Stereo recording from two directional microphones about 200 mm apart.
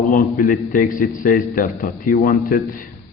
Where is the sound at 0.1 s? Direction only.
40° left (ahead or behind).